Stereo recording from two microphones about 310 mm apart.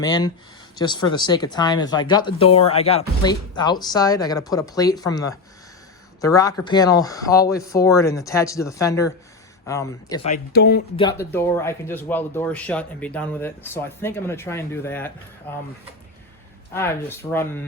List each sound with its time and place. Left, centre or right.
0.0 s speech: centre; by 10.8 s left
10.9 s speech: centre
16.7 s speech: centre